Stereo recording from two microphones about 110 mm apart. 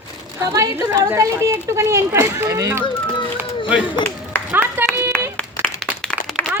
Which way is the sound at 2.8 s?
50° left (ahead or behind).